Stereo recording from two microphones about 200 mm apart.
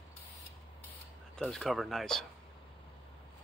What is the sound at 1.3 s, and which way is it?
Speech, centre (ahead or behind).